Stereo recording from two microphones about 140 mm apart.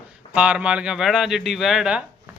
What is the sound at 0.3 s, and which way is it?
Speech, 10° right (ahead or behind).